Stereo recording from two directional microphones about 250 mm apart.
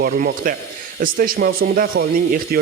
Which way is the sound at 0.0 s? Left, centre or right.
Right.